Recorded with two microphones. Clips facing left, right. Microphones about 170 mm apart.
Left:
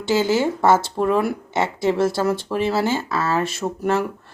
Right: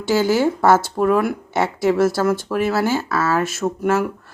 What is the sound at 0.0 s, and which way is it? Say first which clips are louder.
Speech: right 1 dB; 20° left (ahead or behind).